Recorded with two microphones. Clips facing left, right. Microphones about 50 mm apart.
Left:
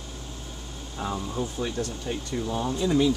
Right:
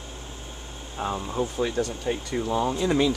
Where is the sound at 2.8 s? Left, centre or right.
Right.